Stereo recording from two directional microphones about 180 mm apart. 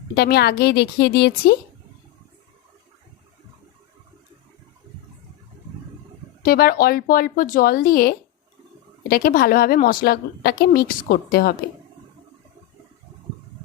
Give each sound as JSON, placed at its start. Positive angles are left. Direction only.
{"t": 0.1, "sound": "a woman's voice", "side_deg": 65}
{"t": 6.4, "sound": "a woman's voice", "side_deg": 55}